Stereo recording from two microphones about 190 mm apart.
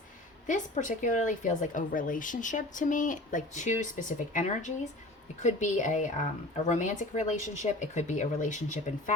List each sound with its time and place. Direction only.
0.4 s speech: 40° left (ahead or behind)